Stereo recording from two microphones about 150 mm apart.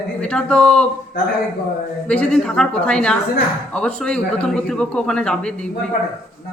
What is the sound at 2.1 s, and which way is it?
A woman's voice, 5° left (ahead or behind).